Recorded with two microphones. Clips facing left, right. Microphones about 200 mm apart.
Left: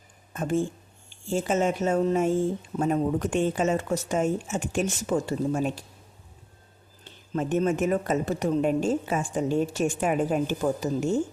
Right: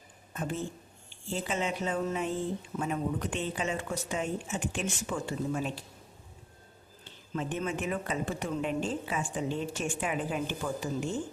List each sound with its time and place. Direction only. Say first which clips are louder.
0.3 s speech: left 8 dB; 45° left (ahead or behind)
7.3 s speech: left 9 dB; 45° left (ahead or behind)